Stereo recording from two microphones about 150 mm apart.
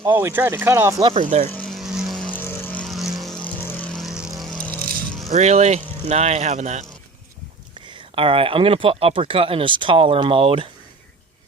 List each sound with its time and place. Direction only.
0.0 s speech: 15° right (ahead or behind)
1.2 s speech: 50° right (ahead or behind)
1.5 s vehicle: 10° left (ahead or behind)
2.8 s vehicle: centre (ahead or behind)
5.3 s speech: 50° right (ahead or behind)
7.9 s speech: 35° right (ahead or behind)